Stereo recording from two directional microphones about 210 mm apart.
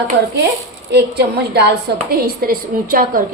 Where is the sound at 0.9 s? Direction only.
50° right (ahead or behind).